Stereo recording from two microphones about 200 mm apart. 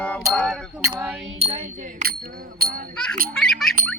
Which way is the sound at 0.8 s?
15° right (ahead or behind).